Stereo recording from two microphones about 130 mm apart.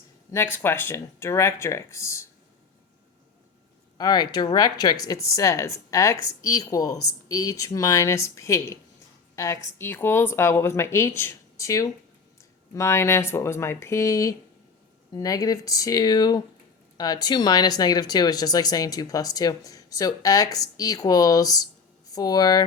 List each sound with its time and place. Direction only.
0.3 s speech: 20° left (ahead or behind)
3.9 s a woman's voice: 30° left (ahead or behind)